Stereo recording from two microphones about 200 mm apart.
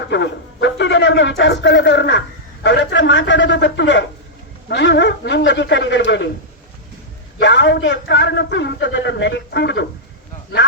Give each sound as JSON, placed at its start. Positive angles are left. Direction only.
{"t": 0.1, "sound": "speech", "side_deg": 60}
{"t": 2.6, "sound": "a sound", "side_deg": 65}
{"t": 4.7, "sound": "a man's voice", "side_deg": 60}
{"t": 7.3, "sound": "a man's voice", "side_deg": 60}